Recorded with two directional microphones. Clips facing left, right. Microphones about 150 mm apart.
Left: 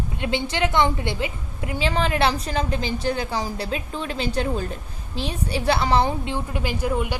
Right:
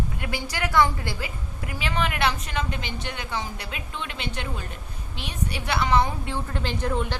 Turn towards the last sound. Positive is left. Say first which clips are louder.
# left 3 dB
turn(degrees=10)  # may be behind; listen again after turning